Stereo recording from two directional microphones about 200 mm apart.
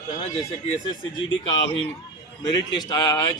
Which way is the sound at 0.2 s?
30° left (ahead or behind).